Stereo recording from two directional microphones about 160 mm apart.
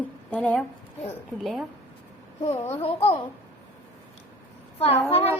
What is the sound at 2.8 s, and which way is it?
Speech, 35° left (ahead or behind).